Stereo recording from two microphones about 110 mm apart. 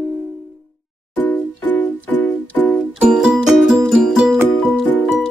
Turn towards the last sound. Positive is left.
turn(degrees=-5)  # may be behind; listen again after turning